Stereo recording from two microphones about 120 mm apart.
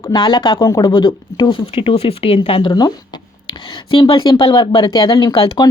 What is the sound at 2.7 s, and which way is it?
Speech, 30° left (ahead or behind).